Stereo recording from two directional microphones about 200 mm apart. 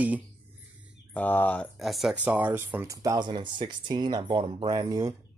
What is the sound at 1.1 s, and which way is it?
Speech, 10° left (ahead or behind).